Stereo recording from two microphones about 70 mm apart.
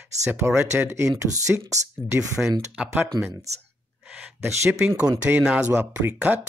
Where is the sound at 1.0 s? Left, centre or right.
Right.